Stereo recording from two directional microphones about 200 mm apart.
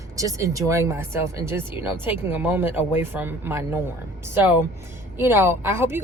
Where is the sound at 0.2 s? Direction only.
15° right (ahead or behind).